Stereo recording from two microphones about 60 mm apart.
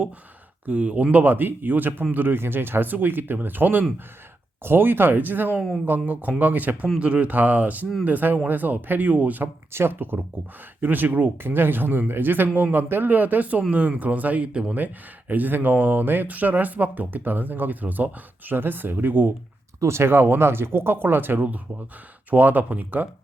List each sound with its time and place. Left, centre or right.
0.6 s speech: right
9.7 s speech: right; by 14.8 s centre
15.3 s speech: right
19.8 s speech: right